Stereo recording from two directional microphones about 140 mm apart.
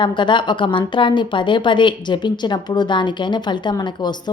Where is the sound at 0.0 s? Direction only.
35° left (ahead or behind).